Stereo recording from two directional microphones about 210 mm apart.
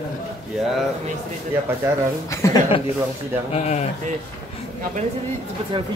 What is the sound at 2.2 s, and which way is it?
Speech, 15° left (ahead or behind).